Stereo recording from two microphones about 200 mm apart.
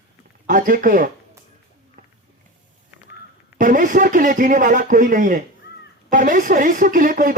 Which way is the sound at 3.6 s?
40° right (ahead or behind).